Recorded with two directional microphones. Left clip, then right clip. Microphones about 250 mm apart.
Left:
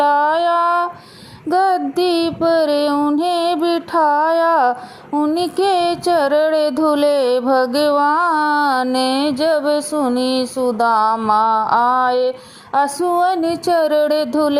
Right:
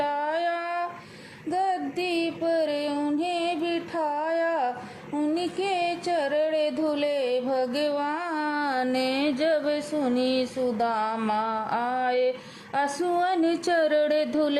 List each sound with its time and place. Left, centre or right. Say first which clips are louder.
0.0 s music: left 12 dB; centre
3.7 s a sound: left 13 dB; left
5.3 s mantra: left 11 dB; left
8.4 s music: left 11 dB; centre
10.8 s a sound: left 14 dB; centre
12.7 s music: left 9 dB; centre